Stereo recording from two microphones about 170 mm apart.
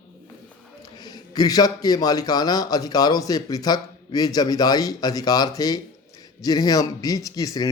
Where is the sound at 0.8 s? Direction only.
25° left (ahead or behind).